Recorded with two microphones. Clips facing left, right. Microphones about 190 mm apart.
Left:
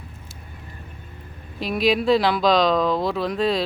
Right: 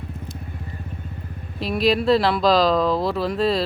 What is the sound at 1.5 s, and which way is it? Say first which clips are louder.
Speech: right 1 dB; centre (ahead or behind).